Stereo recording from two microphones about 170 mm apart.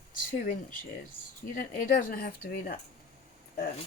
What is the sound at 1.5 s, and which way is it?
Speech, 50° left (ahead or behind).